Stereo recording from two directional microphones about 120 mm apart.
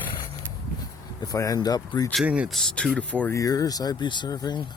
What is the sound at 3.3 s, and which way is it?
Speech, 30° left (ahead or behind).